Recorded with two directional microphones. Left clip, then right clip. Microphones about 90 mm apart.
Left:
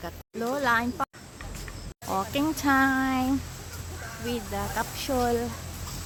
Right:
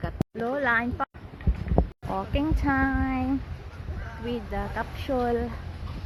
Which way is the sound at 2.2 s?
35° left (ahead or behind).